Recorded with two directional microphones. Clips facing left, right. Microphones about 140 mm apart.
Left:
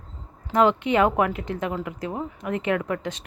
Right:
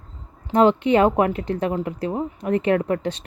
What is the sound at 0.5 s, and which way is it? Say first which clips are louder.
Speech: right 4 dB; 35° right (ahead or behind).